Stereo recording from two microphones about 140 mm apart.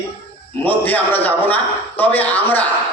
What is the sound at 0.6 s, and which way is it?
A man's voice, 10° left (ahead or behind).